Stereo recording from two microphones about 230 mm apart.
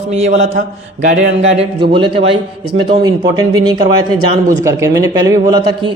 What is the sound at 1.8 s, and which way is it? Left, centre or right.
Speech, right.